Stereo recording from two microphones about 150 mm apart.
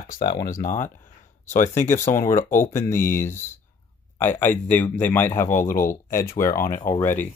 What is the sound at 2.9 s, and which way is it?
Speech, 65° left (ahead or behind).